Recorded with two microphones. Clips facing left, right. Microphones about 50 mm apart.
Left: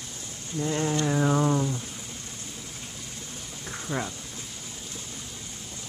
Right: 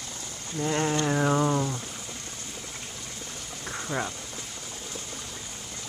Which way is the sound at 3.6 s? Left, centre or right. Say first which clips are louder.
Right 1 dB; centre.